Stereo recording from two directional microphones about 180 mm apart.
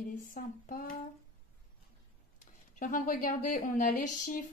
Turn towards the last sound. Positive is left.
turn(degrees=45)  # may be behind; listen again after turning